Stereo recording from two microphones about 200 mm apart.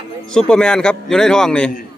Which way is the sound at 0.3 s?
5° left (ahead or behind).